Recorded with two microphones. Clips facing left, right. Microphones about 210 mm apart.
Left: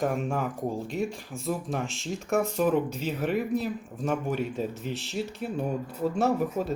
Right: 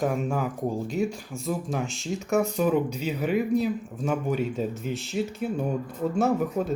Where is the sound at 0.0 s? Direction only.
Centre (ahead or behind).